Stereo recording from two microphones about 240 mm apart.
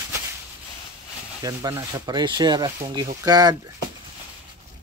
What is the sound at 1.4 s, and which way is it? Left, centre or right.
Speech, centre.